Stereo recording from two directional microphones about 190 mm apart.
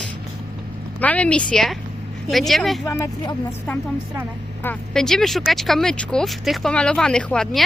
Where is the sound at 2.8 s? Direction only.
15° left (ahead or behind).